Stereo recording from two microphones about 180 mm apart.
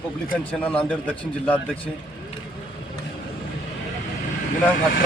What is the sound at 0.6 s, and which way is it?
Speech, 5° left (ahead or behind).